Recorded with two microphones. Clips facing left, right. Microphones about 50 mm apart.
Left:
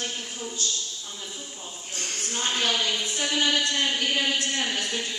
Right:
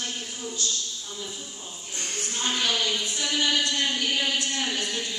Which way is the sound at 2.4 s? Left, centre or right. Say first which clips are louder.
Even; left.